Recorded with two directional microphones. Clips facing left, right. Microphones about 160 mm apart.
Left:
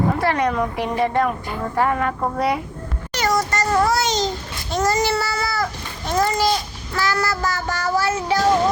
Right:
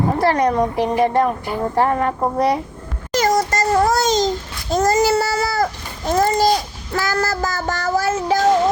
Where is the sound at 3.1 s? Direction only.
40° right (ahead or behind).